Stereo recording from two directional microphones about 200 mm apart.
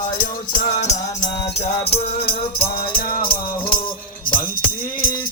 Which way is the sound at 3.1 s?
25° left (ahead or behind).